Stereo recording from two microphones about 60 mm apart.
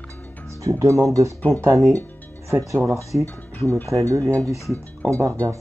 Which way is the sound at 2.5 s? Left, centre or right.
Right.